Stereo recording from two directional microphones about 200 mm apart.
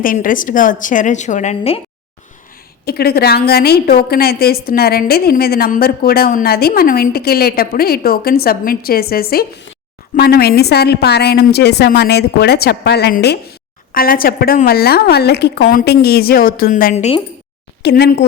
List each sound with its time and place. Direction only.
0.0 s a woman's voice: 45° left (ahead or behind)
2.8 s a woman's voice: 50° left (ahead or behind); by 17.2 s 35° left (ahead or behind)
17.8 s speech: 55° left (ahead or behind)